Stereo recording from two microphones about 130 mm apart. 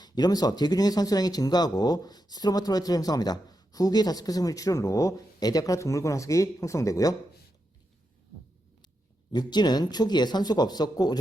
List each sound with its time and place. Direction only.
0.0 s speech: 30° left (ahead or behind)
9.3 s speech: 35° left (ahead or behind)